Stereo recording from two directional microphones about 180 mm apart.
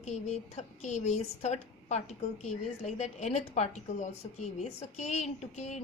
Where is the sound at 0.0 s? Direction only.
35° left (ahead or behind).